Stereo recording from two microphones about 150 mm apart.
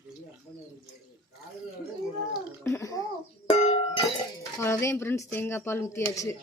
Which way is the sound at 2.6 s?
20° left (ahead or behind).